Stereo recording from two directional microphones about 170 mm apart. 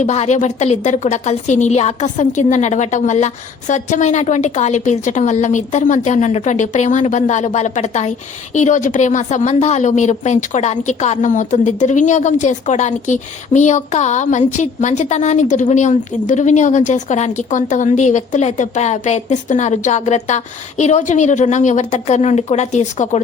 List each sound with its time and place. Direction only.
0.0 s a woman's voice: 40° left (ahead or behind)